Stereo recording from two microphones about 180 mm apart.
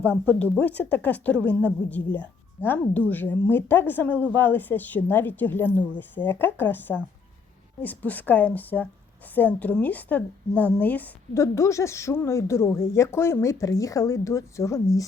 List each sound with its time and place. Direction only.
0.0 s speech: 10° left (ahead or behind)